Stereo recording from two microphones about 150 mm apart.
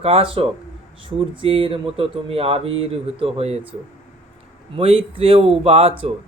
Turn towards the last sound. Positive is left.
turn(degrees=-40)  # may be behind; listen again after turning